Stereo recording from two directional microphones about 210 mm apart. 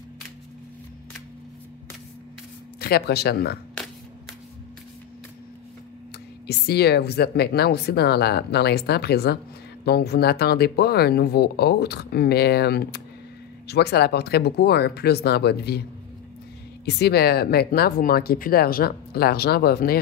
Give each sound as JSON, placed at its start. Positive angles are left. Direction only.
{"t": 2.8, "sound": "speech", "side_deg": 50}
{"t": 6.4, "sound": "speech", "side_deg": 50}
{"t": 16.8, "sound": "speech", "side_deg": 50}